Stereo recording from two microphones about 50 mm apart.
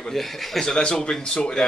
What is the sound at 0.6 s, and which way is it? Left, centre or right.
Speech, centre.